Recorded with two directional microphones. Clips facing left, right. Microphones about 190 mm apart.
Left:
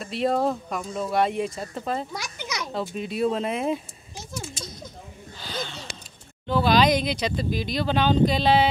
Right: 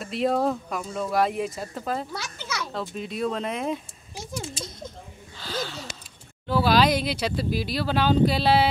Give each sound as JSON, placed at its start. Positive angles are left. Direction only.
{"t": 0.0, "sound": "speech", "side_deg": 0}
{"t": 2.1, "sound": "a child's voice", "side_deg": 15}
{"t": 2.7, "sound": "speech", "side_deg": 5}
{"t": 4.6, "sound": "a sound", "side_deg": -25}
{"t": 5.4, "sound": "gasp", "side_deg": -5}
{"t": 6.4, "sound": "speech", "side_deg": -5}